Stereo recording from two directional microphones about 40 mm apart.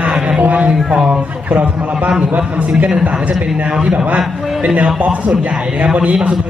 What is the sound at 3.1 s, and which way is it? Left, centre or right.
A man's voice, right.